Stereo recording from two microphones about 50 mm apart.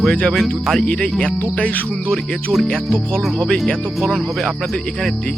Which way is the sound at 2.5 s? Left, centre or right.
Centre.